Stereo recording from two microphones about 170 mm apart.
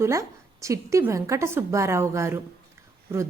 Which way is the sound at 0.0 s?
15° right (ahead or behind).